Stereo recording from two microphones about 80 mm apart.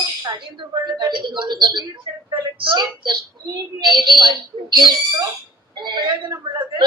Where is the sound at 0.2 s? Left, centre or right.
Right.